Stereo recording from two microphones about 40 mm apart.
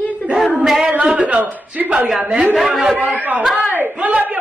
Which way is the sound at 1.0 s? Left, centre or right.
Right.